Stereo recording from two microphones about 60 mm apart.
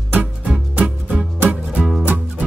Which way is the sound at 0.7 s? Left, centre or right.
Right.